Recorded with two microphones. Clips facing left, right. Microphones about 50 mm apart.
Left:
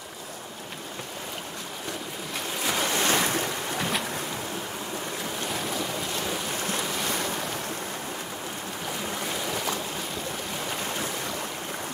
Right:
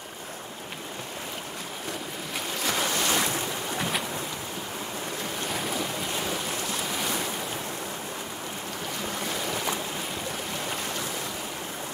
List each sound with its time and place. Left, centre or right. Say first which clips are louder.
2.6 s waves: left 1 dB; centre
2.9 s boat: left 2 dB; left
3.7 s boat: even; centre
5.5 s boat: even; centre
6.9 s waves: even; centre
9.0 s boat: right 1 dB; centre